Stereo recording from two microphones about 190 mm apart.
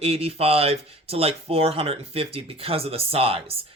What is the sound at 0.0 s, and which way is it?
Speech, 30° right (ahead or behind).